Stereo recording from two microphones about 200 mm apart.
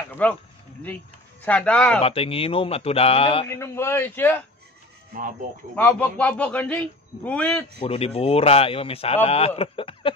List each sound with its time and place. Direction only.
0.1 s a man's voice: 5° left (ahead or behind)
1.4 s a man's voice: 5° left (ahead or behind)
2.0 s speech: 30° left (ahead or behind)
3.4 s a man's voice: 15° left (ahead or behind)
5.8 s a man's voice: 5° left (ahead or behind)
7.8 s speech: 30° left (ahead or behind)